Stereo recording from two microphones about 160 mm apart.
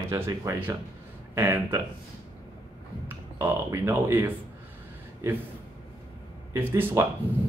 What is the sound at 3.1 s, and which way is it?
Speech, 15° right (ahead or behind).